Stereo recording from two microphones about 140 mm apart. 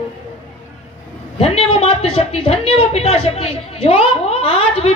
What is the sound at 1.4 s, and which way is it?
A woman's voice, 45° left (ahead or behind).